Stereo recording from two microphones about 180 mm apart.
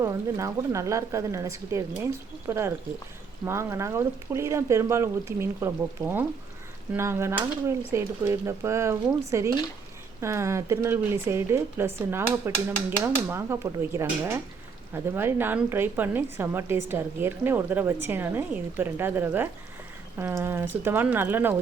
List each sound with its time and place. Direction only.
0.0 s a woman's voice: 15° right (ahead or behind)